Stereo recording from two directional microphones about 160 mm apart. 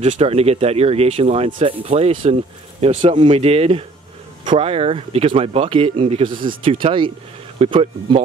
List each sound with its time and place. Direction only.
0.0 s speech: 45° right (ahead or behind)